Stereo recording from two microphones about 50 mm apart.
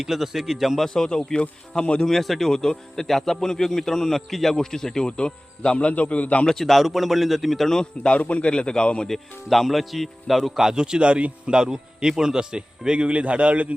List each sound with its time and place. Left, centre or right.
0.0 s speech: centre
0.9 s a man's voice: centre
2.0 s a man's voice: centre; by 6.4 s left
6.4 s speech: centre
8.1 s a man's voice: left
9.0 s a man's voice: centre; by 13.7 s right